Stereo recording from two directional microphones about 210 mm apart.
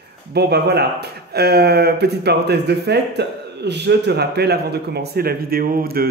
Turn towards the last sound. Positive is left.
turn(degrees=-45)  # may be behind; listen again after turning